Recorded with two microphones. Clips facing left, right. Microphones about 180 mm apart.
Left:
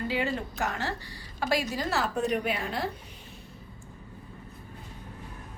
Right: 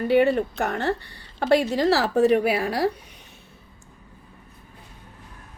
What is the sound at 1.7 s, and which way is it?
A woman's voice, 75° right (ahead or behind).